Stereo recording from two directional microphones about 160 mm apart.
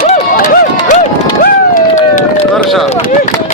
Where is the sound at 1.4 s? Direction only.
55° left (ahead or behind).